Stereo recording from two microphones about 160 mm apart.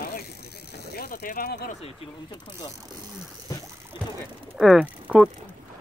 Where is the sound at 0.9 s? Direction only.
70° left (ahead or behind).